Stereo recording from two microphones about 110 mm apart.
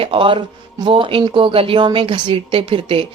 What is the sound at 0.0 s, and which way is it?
A woman's voice, 50° right (ahead or behind).